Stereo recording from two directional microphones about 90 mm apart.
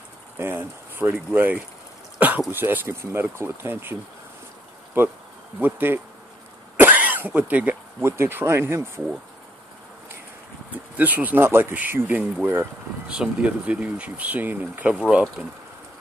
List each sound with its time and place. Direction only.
0.4 s speech: 25° right (ahead or behind)
2.1 s a sound: 15° right (ahead or behind)
2.5 s speech: 25° right (ahead or behind)
5.6 s speech: 20° right (ahead or behind)
6.8 s cough: 20° right (ahead or behind)
8.0 s speech: 25° right (ahead or behind)
11.0 s speech: 20° right (ahead or behind)